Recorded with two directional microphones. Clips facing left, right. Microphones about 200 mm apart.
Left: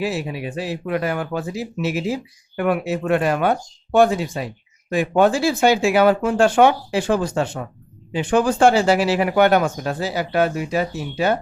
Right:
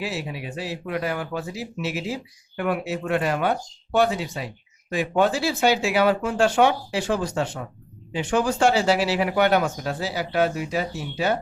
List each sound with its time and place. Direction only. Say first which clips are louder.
0.0 s speech: left 6 dB; 50° left (ahead or behind)